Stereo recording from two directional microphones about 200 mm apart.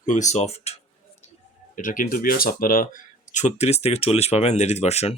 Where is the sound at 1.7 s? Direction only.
40° left (ahead or behind).